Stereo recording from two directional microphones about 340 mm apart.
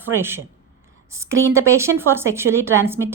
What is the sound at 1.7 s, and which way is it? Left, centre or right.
Speech, centre.